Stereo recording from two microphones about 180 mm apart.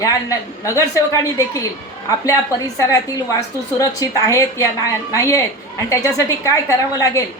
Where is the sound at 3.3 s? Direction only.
20° left (ahead or behind).